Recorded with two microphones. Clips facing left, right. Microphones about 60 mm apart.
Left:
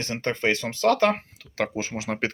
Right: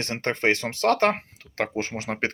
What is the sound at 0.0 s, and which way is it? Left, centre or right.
Speech, right.